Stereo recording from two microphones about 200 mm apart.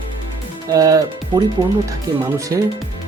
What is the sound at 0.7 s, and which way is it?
Speech, 15° right (ahead or behind).